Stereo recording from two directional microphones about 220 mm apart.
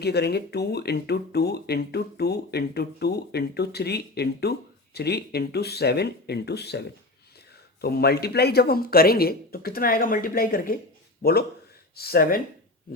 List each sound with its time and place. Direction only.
0.0 s speech: 50° left (ahead or behind)